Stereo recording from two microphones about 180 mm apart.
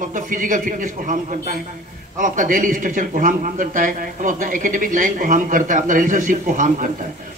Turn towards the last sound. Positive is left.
turn(degrees=-45)  # may be behind; listen again after turning